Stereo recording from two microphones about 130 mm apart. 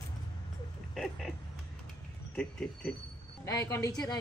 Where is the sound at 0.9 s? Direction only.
5° left (ahead or behind).